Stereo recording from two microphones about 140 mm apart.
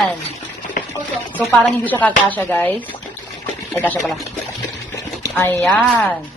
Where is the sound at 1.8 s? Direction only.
10° left (ahead or behind).